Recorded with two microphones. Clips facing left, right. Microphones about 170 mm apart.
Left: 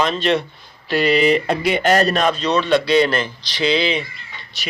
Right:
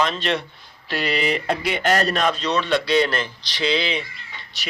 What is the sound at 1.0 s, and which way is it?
A man's voice, 5° left (ahead or behind).